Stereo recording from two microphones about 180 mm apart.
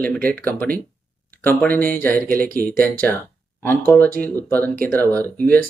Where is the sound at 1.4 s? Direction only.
10° left (ahead or behind).